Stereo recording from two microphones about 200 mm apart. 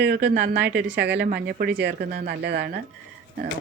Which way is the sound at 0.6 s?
5° right (ahead or behind).